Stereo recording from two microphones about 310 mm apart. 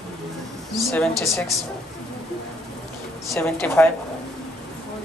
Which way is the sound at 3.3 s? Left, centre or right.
Centre.